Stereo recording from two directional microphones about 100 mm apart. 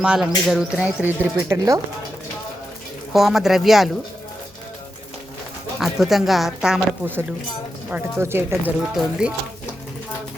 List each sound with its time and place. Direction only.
0.0 s bird: 5° right (ahead or behind)
1.0 s speech: 20° right (ahead or behind)
1.5 s speech: 35° right (ahead or behind)
3.1 s a woman's voice: centre (ahead or behind)
5.8 s a woman's voice: 5° right (ahead or behind)
7.9 s speech: 20° right (ahead or behind)
8.8 s bird: 5° right (ahead or behind)